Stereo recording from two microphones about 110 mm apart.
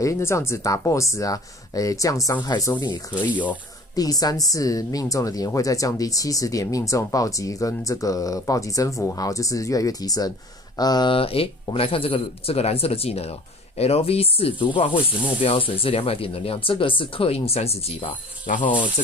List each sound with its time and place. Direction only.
0.0 s a woman's voice: 25° left (ahead or behind)
3.9 s a woman's voice: 35° left (ahead or behind)
11.1 s speech: 60° left (ahead or behind)